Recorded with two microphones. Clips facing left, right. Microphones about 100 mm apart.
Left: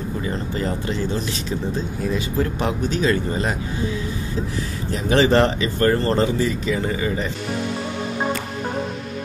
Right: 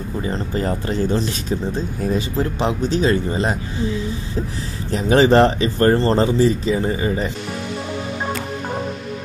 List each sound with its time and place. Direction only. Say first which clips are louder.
0.2 s speech: right 4 dB; 30° right (ahead or behind)
0.7 s speech: right 4 dB; 40° right (ahead or behind)
2.3 s speech: right 2 dB; 30° right (ahead or behind)
4.9 s speech: right 3 dB; 35° right (ahead or behind)